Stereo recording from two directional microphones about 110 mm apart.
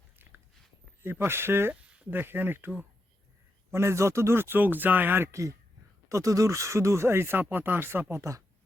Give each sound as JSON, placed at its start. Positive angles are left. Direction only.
{"t": 1.0, "sound": "speech", "side_deg": -20}